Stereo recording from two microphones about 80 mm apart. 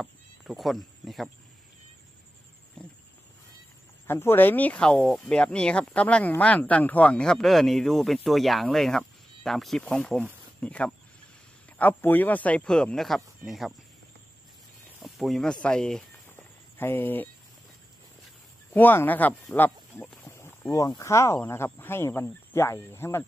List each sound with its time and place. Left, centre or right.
0.0 s insect: centre
2.8 s wild animals: centre
4.1 s speech: left
5.0 s speech: centre
15.0 s speech: centre
16.3 s a sound: left
18.7 s speech: left
20.2 s a sound: left
20.7 s speech: left